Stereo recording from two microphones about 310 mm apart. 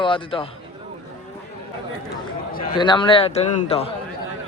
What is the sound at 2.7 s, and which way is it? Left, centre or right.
A man's voice, centre.